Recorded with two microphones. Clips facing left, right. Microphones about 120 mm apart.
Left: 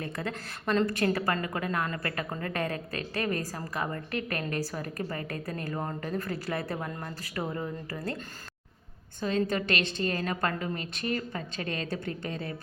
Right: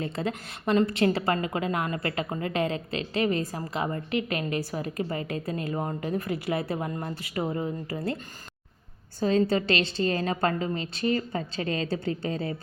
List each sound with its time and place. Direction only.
0.0 s a woman's voice: 20° right (ahead or behind)
9.4 s a woman's voice: 25° right (ahead or behind)